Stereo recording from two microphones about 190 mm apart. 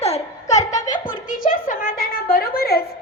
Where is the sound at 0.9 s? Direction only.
45° left (ahead or behind).